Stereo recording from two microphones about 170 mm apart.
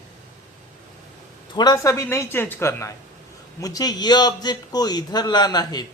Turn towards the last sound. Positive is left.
turn(degrees=25)  # may be behind; listen again after turning